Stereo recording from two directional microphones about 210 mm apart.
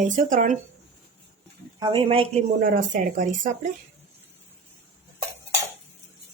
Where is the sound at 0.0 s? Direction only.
40° right (ahead or behind).